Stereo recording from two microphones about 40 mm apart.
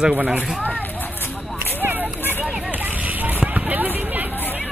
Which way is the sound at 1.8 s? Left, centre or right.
Right.